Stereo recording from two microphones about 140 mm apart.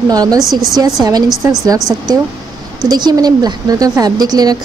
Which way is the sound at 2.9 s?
30° right (ahead or behind).